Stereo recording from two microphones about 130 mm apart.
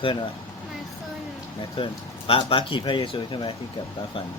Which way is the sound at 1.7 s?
45° left (ahead or behind).